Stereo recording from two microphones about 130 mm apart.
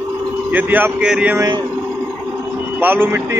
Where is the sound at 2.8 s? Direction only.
15° right (ahead or behind).